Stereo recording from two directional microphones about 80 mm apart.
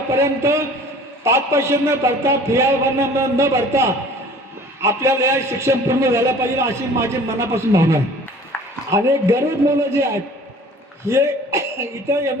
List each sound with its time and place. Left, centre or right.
0.1 s a man's voice: right